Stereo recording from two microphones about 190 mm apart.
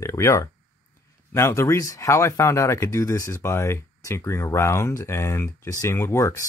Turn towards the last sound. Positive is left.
turn(degrees=15)  # may be behind; listen again after turning